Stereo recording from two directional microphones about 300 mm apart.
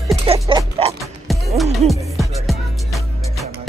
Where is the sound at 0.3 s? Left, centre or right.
Centre.